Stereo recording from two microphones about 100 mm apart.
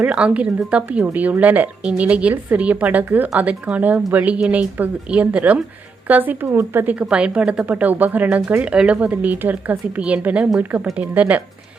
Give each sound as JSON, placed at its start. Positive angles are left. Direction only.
{"t": 0.0, "sound": "a woman's voice", "side_deg": -15}